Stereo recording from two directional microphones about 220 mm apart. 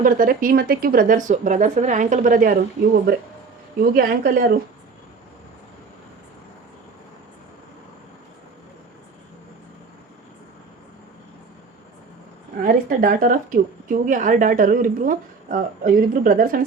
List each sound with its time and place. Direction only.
0.0 s a woman's voice: 40° right (ahead or behind)
12.6 s a woman's voice: 40° right (ahead or behind)